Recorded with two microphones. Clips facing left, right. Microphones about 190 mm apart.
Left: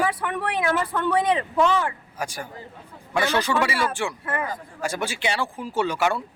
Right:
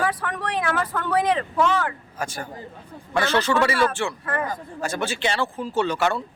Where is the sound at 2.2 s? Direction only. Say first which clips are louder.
Right 1 dB; 10° left (ahead or behind).